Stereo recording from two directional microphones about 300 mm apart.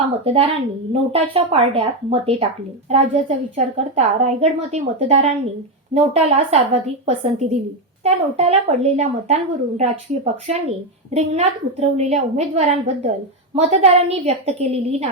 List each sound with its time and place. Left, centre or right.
0.3 s a woman's voice: centre
11.1 s a woman's voice: right